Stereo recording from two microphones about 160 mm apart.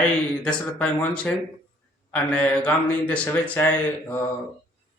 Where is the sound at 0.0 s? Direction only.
5° left (ahead or behind).